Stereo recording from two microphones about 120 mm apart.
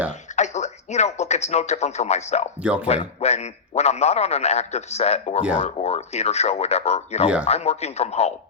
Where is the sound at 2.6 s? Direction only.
10° right (ahead or behind).